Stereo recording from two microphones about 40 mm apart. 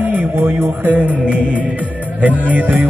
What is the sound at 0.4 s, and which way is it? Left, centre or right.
Music, right.